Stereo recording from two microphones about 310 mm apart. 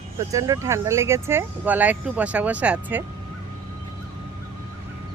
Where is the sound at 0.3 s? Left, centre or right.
Centre.